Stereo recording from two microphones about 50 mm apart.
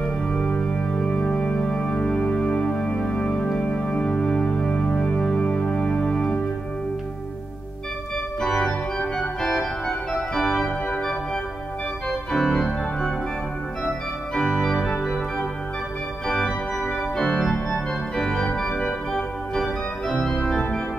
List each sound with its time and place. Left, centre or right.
0.0 s music: left
8.4 s organ: centre
12.3 s organ: centre
13.8 s organ: centre
17.4 s organ: centre
20.1 s organ: centre